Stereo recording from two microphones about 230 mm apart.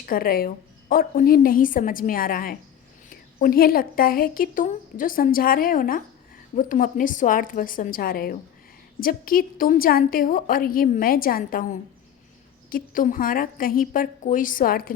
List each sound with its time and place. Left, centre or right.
0.0 s a woman's voice: left